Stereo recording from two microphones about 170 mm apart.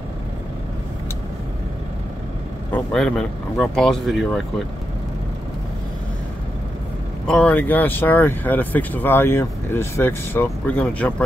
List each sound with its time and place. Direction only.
2.7 s speech: 5° left (ahead or behind)
7.2 s speech: 5° left (ahead or behind)